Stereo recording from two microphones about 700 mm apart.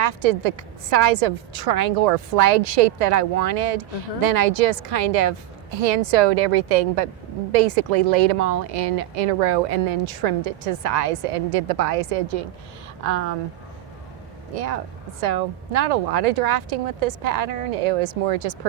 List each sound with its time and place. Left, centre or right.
0.0 s a woman's voice: right
14.5 s a woman's voice: right